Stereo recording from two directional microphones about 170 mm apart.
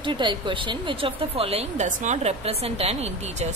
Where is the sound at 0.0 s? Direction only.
30° right (ahead or behind).